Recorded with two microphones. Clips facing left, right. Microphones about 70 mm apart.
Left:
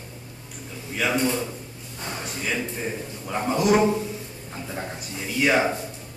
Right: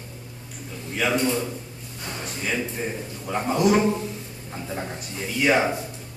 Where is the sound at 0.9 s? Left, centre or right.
Centre.